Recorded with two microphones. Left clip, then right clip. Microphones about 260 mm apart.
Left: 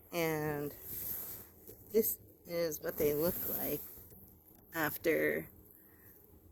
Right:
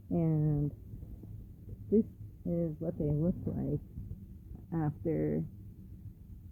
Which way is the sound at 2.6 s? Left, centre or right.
Centre.